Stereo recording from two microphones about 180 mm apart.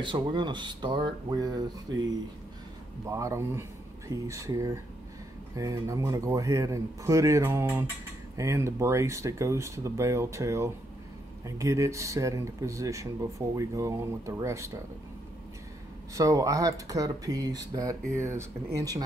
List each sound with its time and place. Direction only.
0.0 s speech: 25° right (ahead or behind)
3.1 s speech: 15° right (ahead or behind)
16.2 s speech: 20° right (ahead or behind)